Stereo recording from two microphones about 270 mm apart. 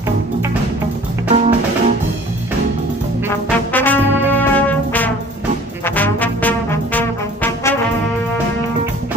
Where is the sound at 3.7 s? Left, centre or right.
Centre.